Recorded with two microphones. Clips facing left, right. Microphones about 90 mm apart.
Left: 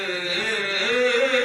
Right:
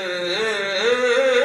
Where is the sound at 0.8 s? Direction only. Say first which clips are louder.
Right 4 dB; 25° right (ahead or behind).